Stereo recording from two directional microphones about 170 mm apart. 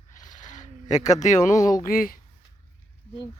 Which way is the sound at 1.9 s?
55° left (ahead or behind).